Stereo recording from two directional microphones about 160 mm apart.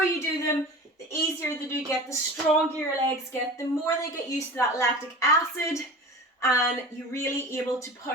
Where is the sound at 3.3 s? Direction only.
20° left (ahead or behind).